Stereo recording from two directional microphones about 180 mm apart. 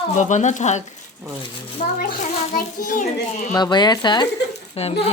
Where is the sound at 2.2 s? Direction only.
45° left (ahead or behind).